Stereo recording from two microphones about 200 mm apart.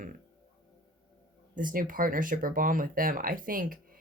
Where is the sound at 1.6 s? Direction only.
45° right (ahead or behind).